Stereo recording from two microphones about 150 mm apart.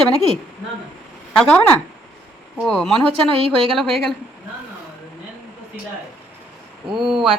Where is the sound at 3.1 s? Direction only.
35° right (ahead or behind).